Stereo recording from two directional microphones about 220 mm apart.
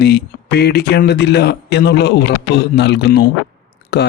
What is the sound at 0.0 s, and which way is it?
Speech, 45° left (ahead or behind).